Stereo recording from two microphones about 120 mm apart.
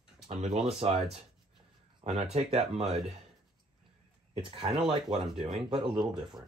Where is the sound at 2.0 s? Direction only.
65° right (ahead or behind).